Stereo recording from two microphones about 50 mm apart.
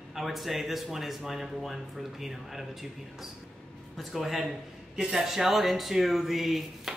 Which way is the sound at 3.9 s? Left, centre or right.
Centre.